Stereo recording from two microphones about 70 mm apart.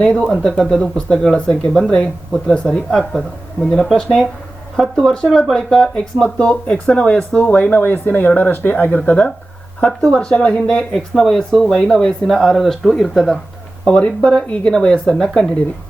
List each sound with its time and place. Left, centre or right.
0.3 s speech: centre
7.8 s speech: left; by 13.4 s centre
13.8 s speech: centre